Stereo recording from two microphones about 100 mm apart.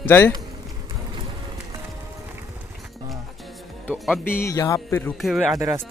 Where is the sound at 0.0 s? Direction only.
20° left (ahead or behind).